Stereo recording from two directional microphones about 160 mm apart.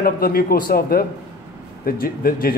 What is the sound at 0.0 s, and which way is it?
Speech, 70° left (ahead or behind).